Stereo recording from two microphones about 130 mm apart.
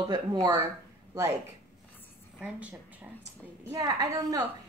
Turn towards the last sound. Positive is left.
turn(degrees=-30)  # may be behind; listen again after turning